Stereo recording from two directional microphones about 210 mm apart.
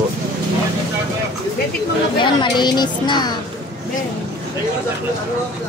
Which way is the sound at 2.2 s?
20° left (ahead or behind).